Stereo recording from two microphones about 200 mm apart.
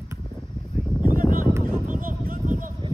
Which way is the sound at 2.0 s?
45° right (ahead or behind).